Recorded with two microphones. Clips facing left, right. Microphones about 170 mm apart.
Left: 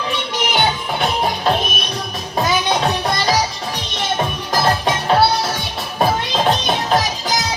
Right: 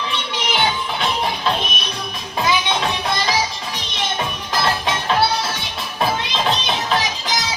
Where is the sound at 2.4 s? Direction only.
40° left (ahead or behind).